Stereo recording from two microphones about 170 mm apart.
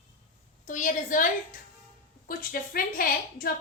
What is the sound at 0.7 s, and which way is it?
Speech, 50° left (ahead or behind).